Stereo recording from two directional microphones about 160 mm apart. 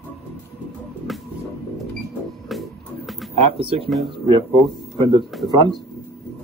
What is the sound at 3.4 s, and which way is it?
Speech, 35° right (ahead or behind).